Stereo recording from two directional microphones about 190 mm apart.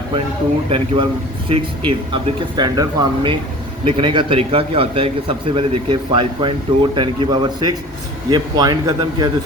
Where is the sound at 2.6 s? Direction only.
25° right (ahead or behind).